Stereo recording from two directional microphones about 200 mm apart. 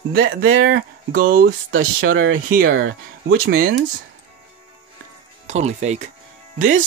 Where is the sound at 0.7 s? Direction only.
45° right (ahead or behind).